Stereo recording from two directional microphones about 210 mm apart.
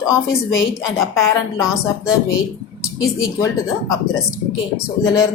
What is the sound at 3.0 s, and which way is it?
Speech, 15° left (ahead or behind).